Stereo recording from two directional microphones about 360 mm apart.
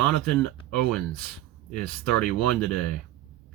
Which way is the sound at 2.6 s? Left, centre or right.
Left.